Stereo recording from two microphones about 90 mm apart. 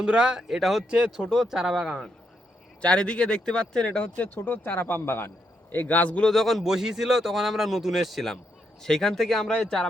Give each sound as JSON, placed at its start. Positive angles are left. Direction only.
{"t": 0.0, "sound": "speech", "side_deg": -10}
{"t": 2.8, "sound": "a man's voice", "side_deg": 10}
{"t": 6.3, "sound": "speech", "side_deg": 0}